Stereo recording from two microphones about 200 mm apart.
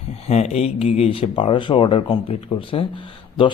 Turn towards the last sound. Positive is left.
turn(degrees=25)  # may be behind; listen again after turning